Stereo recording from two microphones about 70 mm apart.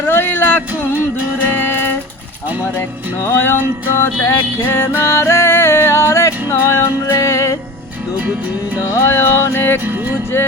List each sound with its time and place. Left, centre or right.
0.0 s music: left
3.2 s music: left
9.0 s music: left